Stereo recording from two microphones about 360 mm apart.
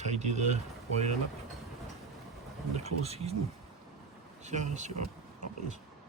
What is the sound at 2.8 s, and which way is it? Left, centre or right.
Speech, centre.